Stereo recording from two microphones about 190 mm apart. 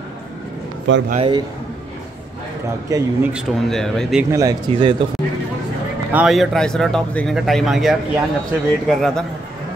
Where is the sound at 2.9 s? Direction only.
20° right (ahead or behind).